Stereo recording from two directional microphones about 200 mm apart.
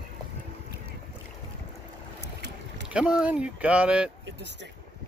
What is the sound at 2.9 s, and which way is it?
Speech, 5° right (ahead or behind).